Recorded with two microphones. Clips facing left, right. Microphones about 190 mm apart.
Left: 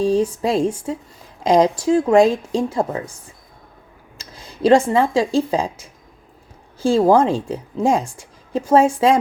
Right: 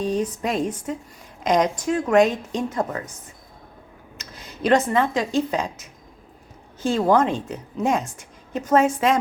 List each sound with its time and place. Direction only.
0.0 s a woman's voice: 30° left (ahead or behind)
4.2 s a sound: 30° left (ahead or behind)
5.1 s a woman's voice: 30° left (ahead or behind)